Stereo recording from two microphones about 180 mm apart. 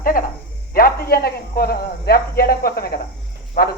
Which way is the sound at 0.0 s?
50° left (ahead or behind).